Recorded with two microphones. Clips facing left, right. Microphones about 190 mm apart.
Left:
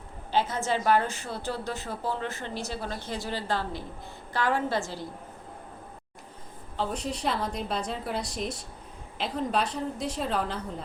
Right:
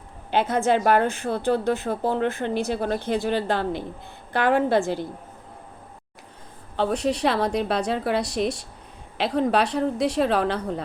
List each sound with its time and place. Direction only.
0.3 s a woman's voice: 60° right (ahead or behind)
6.7 s a woman's voice: 70° right (ahead or behind)